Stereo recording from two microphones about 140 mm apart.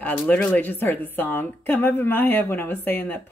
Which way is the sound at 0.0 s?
10° left (ahead or behind).